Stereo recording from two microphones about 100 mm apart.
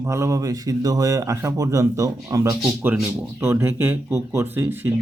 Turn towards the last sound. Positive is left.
turn(degrees=-25)  # may be behind; listen again after turning